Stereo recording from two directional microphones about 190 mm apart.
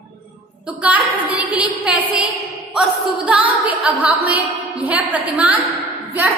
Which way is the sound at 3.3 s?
5° right (ahead or behind).